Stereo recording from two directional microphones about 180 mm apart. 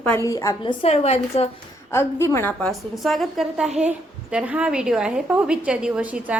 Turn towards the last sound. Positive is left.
turn(degrees=-5)  # may be behind; listen again after turning